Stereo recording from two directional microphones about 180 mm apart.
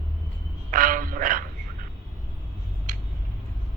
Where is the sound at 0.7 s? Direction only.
50° right (ahead or behind).